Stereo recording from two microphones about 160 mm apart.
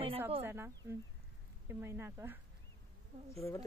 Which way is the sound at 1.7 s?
15° right (ahead or behind).